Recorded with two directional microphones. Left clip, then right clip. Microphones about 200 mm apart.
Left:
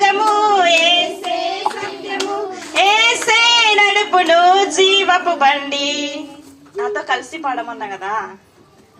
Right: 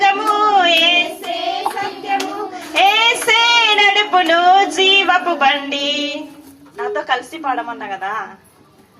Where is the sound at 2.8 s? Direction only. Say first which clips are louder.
Even; 25° left (ahead or behind).